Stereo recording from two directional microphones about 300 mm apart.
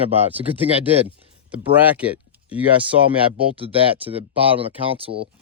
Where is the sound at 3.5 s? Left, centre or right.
Centre.